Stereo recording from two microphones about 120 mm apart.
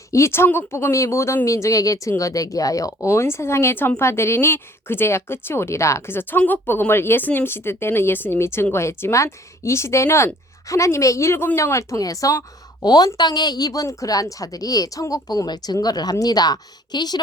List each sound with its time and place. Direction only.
0.1 s speech: 20° left (ahead or behind)